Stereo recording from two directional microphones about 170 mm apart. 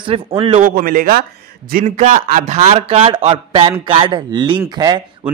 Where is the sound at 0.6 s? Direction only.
55° right (ahead or behind).